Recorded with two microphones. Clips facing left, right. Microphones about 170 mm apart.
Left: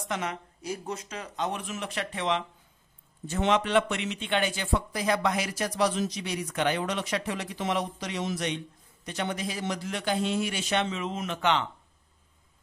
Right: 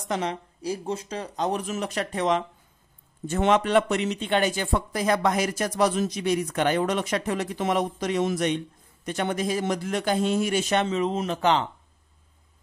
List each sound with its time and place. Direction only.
0.1 s speech: 30° right (ahead or behind)